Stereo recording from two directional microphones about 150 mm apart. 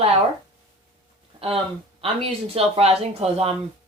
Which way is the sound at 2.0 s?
40° right (ahead or behind).